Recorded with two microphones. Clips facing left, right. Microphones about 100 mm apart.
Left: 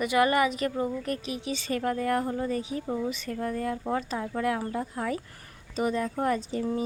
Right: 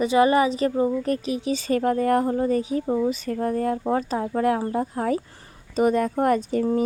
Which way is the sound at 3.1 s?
40° right (ahead or behind).